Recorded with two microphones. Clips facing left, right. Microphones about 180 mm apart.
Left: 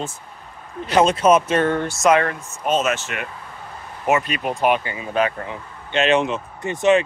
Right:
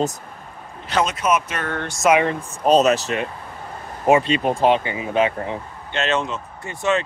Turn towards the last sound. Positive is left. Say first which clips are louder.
# left 5 dB
turn(degrees=20)  # may be behind; listen again after turning